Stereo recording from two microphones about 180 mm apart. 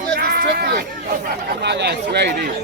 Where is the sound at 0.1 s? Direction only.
60° right (ahead or behind).